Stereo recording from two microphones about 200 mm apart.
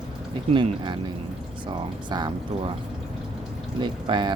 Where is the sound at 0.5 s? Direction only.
25° right (ahead or behind).